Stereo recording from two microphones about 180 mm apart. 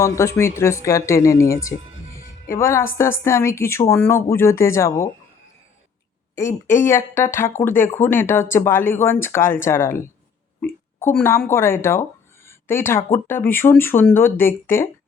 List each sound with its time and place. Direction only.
0.0 s a woman's voice: 15° left (ahead or behind)
6.3 s a woman's voice: 15° left (ahead or behind)